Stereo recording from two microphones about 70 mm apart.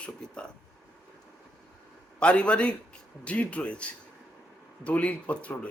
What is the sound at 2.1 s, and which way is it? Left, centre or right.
A man's voice, centre.